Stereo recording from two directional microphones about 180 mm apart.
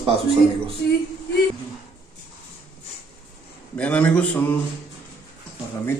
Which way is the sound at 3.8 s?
5° left (ahead or behind).